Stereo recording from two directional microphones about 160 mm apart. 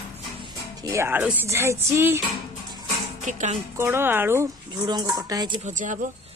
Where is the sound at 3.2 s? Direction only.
50° right (ahead or behind).